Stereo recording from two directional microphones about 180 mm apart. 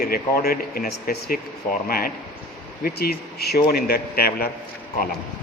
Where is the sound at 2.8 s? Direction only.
60° left (ahead or behind).